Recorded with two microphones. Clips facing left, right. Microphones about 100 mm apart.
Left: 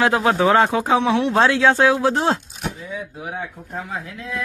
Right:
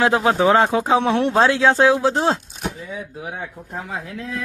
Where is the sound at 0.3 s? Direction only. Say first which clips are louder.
Even; 25° right (ahead or behind).